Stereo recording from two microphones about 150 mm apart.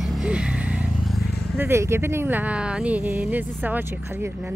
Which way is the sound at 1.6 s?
15° right (ahead or behind).